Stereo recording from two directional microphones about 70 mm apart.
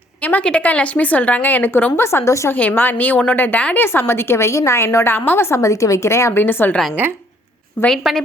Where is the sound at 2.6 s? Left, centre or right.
Left.